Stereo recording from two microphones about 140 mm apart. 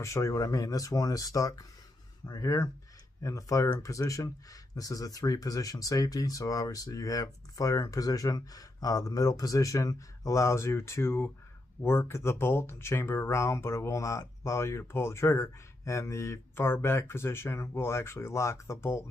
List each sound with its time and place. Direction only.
0.0 s speech: 20° left (ahead or behind)